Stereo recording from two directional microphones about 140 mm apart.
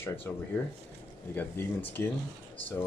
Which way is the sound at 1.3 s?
15° left (ahead or behind).